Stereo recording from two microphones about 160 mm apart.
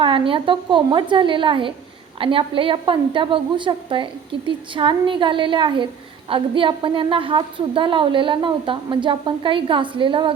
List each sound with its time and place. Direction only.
0.0 s a woman's voice: 35° right (ahead or behind)